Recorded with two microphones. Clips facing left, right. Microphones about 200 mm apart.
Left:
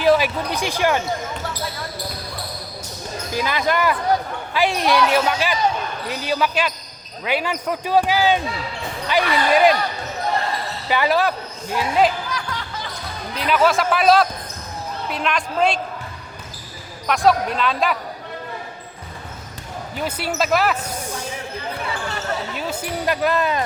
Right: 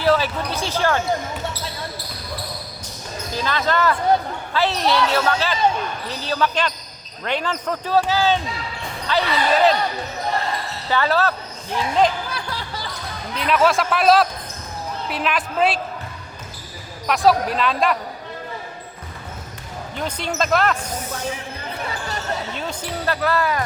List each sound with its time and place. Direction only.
0.0 s speech: 15° left (ahead or behind)
3.3 s speech: 10° left (ahead or behind)
10.8 s a woman's voice: 15° left (ahead or behind)
12.3 s music: 35° right (ahead or behind)
13.3 s speech: centre (ahead or behind)
17.1 s speech: centre (ahead or behind)
20.0 s speech: 5° left (ahead or behind)
22.5 s speech: 10° left (ahead or behind)